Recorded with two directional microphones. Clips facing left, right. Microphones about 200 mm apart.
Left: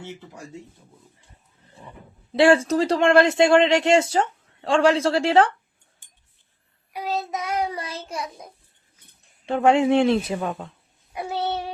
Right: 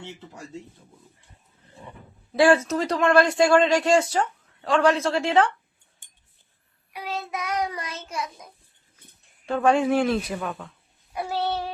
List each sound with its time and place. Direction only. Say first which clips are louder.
2.3 s speech: left 2 dB; 25° left (ahead or behind)
6.9 s child singing: left 4 dB; 40° left (ahead or behind)
9.5 s speech: left 3 dB; 25° left (ahead or behind)